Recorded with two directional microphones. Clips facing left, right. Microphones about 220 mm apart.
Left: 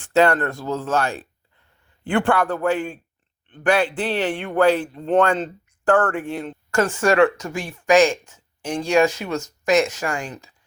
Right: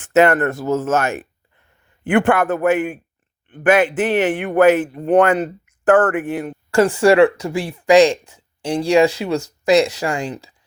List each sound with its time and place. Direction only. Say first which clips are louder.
0.2 s a man's voice: right 4 dB; 20° right (ahead or behind)
6.7 s speech: right 6 dB; 35° right (ahead or behind)